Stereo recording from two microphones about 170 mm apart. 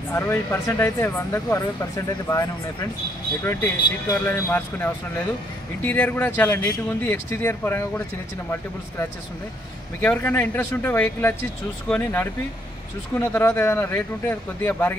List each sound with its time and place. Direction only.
0.1 s speech: 15° left (ahead or behind)